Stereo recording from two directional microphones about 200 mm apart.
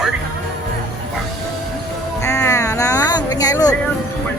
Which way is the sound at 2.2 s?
15° left (ahead or behind).